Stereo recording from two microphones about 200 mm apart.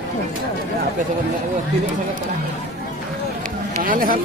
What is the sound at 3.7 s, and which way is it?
Chatter, 45° right (ahead or behind).